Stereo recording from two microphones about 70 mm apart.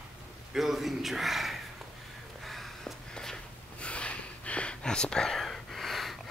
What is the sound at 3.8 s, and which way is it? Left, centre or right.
Whispering, centre.